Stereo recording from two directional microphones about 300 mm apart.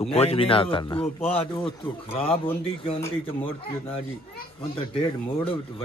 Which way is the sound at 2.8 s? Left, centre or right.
Centre.